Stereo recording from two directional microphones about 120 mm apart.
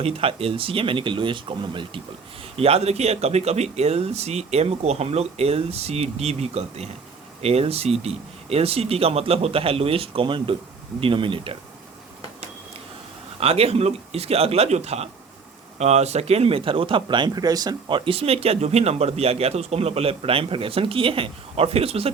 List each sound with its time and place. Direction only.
0.0 s speech: 55° right (ahead or behind)
2.6 s speech: 55° right (ahead or behind)
13.4 s speech: 55° right (ahead or behind)